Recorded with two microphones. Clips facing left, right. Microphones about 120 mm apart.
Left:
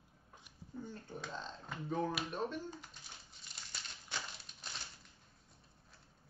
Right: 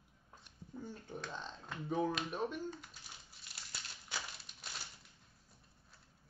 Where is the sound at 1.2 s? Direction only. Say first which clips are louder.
Even; 5° left (ahead or behind).